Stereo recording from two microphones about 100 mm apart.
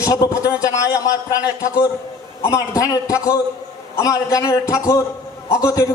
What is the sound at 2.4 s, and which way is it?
A man's voice, 30° left (ahead or behind).